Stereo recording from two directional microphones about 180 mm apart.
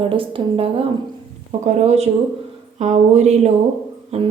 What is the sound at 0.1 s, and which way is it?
A woman's voice, 30° right (ahead or behind).